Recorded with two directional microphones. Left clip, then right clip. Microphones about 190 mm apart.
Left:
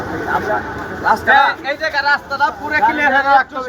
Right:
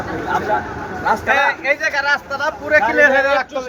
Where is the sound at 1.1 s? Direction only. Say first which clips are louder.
Left 4 dB; 5° right (ahead or behind).